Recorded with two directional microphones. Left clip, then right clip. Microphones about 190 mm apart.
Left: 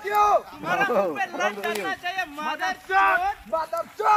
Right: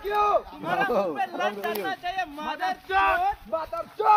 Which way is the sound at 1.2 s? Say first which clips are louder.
Left 1 dB; 20° right (ahead or behind).